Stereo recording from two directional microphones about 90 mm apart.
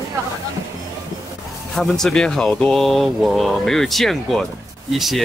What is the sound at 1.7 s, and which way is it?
Speech, 5° left (ahead or behind).